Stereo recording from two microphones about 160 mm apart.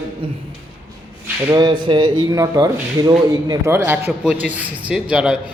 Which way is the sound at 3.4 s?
20° right (ahead or behind).